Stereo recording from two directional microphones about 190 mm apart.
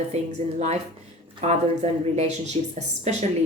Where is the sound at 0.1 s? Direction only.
35° right (ahead or behind).